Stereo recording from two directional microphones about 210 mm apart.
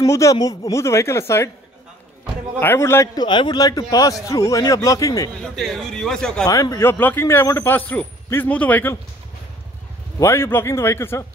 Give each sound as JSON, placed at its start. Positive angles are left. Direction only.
{"t": 0.0, "sound": "a man's voice", "side_deg": 15}
{"t": 2.6, "sound": "a man's voice", "side_deg": 10}
{"t": 5.4, "sound": "a man's voice", "side_deg": 0}
{"t": 6.4, "sound": "a man's voice", "side_deg": 15}
{"t": 10.1, "sound": "a man's voice", "side_deg": 10}